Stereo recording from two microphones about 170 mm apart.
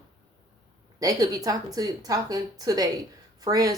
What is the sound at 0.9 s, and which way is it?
A woman's voice, 20° right (ahead or behind).